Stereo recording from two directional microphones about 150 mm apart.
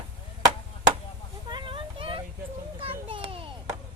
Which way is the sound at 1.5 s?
35° right (ahead or behind).